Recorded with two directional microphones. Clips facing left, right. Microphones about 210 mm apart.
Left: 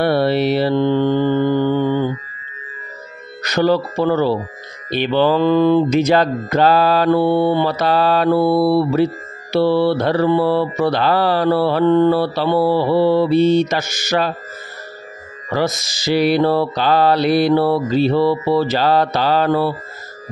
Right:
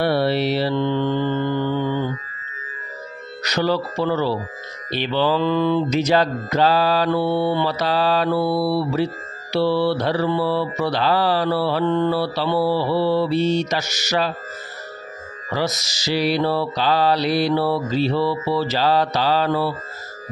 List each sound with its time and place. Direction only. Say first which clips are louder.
0.0 s mantra: left 4 dB; 55° left (ahead or behind)
3.4 s music: left 5 dB; 50° left (ahead or behind)
15.5 s music: left 4 dB; 55° left (ahead or behind)